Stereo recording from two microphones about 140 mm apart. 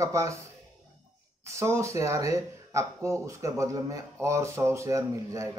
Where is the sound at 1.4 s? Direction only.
20° right (ahead or behind).